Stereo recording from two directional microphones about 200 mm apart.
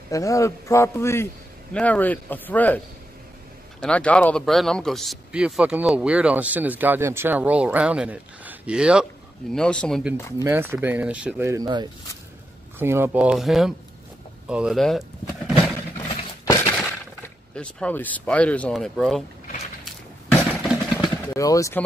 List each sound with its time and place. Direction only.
0.1 s a man's voice: 15° left (ahead or behind)
3.8 s speech: 5° left (ahead or behind)
10.4 s speech: 10° right (ahead or behind)
16.0 s a sound: 10° left (ahead or behind)
16.7 s speech: 5° left (ahead or behind)
20.6 s vehicle: 5° right (ahead or behind)
21.3 s speech: 15° left (ahead or behind)